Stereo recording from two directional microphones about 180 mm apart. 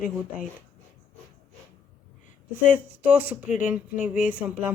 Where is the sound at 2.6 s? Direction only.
10° right (ahead or behind).